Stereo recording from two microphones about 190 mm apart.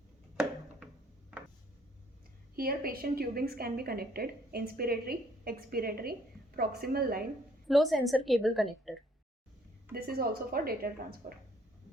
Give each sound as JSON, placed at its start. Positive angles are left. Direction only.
{"t": 2.6, "sound": "a woman's voice", "side_deg": -50}
{"t": 7.7, "sound": "a woman's voice", "side_deg": 0}
{"t": 9.9, "sound": "a woman's voice", "side_deg": -50}